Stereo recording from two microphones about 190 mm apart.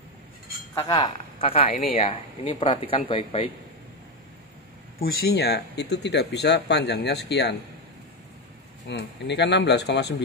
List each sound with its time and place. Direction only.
0.7 s speech: 20° left (ahead or behind)
4.9 s speech: 55° left (ahead or behind)
8.8 s speech: 65° left (ahead or behind)